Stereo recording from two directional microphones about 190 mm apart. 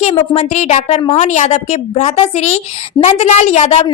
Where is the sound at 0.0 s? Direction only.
35° left (ahead or behind).